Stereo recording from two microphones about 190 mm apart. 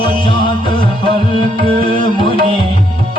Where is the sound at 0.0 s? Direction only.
25° left (ahead or behind).